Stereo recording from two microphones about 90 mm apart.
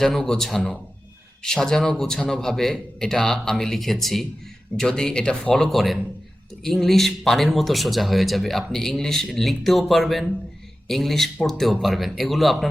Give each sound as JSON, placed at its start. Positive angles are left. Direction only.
{"t": 0.0, "sound": "speech", "side_deg": 5}